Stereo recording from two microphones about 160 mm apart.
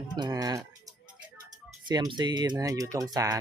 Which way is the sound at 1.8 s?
25° right (ahead or behind).